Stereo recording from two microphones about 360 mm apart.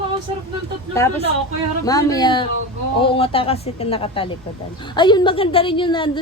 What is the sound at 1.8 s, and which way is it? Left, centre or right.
A woman's voice, centre.